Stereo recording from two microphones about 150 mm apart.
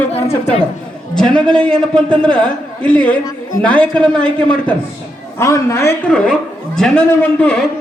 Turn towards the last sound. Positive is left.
turn(degrees=10)  # may be behind; listen again after turning